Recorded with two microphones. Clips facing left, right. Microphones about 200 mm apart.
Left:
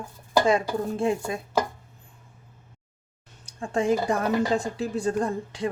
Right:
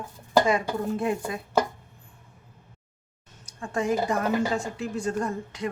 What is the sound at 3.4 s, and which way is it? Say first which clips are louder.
A woman's voice: left 3 dB; 30° left (ahead or behind).